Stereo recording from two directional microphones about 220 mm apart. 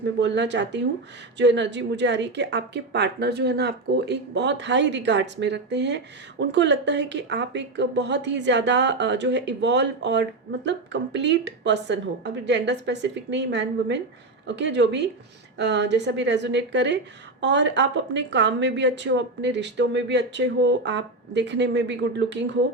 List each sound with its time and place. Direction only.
0.0 s speech: 50° right (ahead or behind)